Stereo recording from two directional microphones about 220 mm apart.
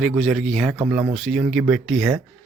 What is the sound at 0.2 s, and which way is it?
Speech, centre (ahead or behind).